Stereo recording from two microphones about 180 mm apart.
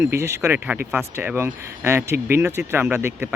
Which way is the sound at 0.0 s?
15° right (ahead or behind).